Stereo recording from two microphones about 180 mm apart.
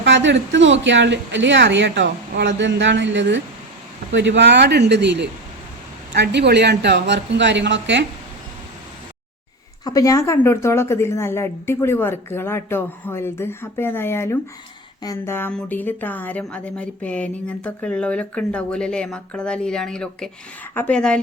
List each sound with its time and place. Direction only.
0.0 s a woman's voice: 90° right
9.8 s speech: 20° left (ahead or behind)